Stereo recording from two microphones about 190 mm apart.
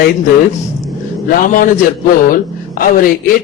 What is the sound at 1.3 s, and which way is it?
A man's voice, 45° left (ahead or behind).